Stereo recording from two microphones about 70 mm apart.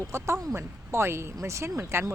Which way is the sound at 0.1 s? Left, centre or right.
Right.